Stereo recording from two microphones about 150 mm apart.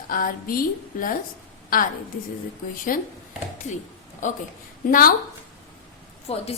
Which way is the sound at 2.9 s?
70° left (ahead or behind).